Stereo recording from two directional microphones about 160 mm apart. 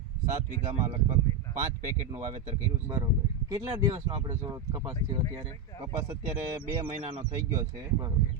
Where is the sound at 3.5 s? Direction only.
25° right (ahead or behind).